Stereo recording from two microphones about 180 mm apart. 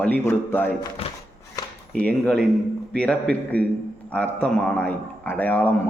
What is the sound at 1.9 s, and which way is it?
Speech, 5° left (ahead or behind).